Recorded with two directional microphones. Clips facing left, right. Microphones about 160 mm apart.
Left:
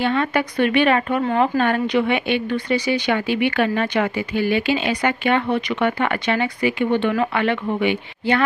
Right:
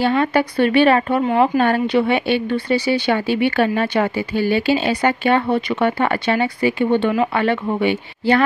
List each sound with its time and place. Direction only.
0.0 s a woman's voice: 35° right (ahead or behind)